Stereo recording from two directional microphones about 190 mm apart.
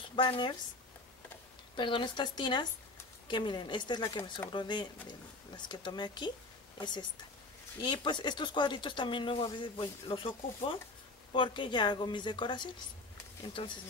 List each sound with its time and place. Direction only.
0.1 s speech: 25° left (ahead or behind)
1.8 s speech: 25° left (ahead or behind)